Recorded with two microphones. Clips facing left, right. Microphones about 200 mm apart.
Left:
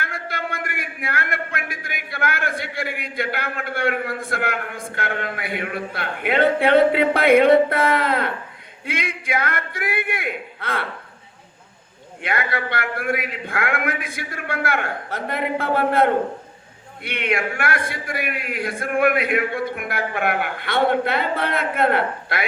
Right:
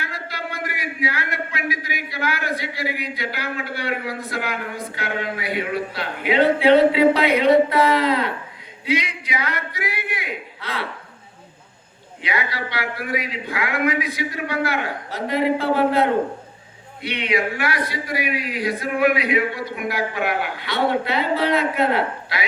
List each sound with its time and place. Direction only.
0.0 s a man's voice: 55° left (ahead or behind)
12.2 s a man's voice: 55° left (ahead or behind)